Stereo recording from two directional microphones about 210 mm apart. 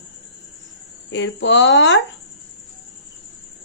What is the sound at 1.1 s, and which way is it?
Speech, 60° left (ahead or behind).